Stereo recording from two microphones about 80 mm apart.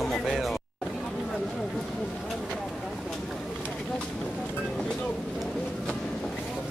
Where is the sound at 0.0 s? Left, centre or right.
Centre.